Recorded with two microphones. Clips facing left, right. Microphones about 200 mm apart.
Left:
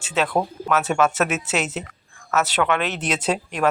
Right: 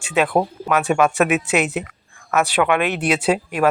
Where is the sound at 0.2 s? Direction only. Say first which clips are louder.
Right 4 dB; 15° right (ahead or behind).